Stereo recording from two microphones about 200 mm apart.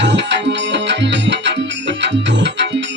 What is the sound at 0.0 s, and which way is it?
Music, 60° right (ahead or behind).